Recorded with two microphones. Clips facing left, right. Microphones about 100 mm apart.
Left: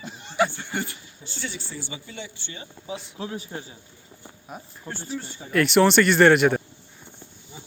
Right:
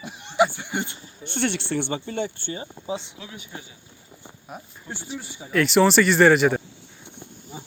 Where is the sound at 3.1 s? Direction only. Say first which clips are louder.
Left 6 dB; 35° left (ahead or behind).